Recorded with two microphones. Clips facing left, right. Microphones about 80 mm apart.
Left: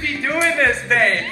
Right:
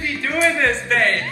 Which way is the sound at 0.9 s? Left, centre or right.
Centre.